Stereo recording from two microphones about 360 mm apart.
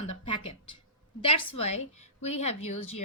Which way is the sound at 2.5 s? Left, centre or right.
Left.